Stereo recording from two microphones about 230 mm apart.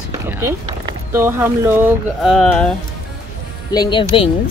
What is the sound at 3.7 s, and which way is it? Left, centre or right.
Speech, centre.